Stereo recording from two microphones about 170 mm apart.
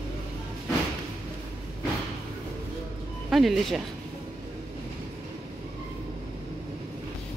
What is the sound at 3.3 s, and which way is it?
Speech, centre (ahead or behind).